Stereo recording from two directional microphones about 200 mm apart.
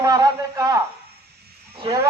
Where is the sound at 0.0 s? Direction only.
20° right (ahead or behind).